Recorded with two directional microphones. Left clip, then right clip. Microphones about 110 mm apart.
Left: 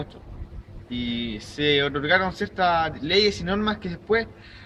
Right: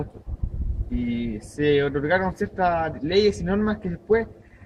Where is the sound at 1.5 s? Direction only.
15° left (ahead or behind).